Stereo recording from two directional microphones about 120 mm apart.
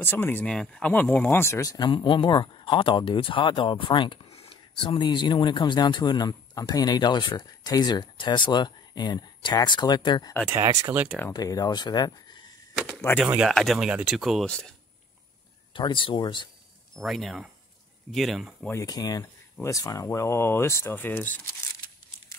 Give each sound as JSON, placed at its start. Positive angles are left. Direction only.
{"t": 0.0, "sound": "speech", "side_deg": 15}
{"t": 1.9, "sound": "speech", "side_deg": 45}
{"t": 10.5, "sound": "speech", "side_deg": -25}
{"t": 11.3, "sound": "speech", "side_deg": 30}
{"t": 13.1, "sound": "speech", "side_deg": 20}
{"t": 13.5, "sound": "speech", "side_deg": 0}
{"t": 15.7, "sound": "speech", "side_deg": 45}
{"t": 16.9, "sound": "speech", "side_deg": 0}
{"t": 18.7, "sound": "speech", "side_deg": 30}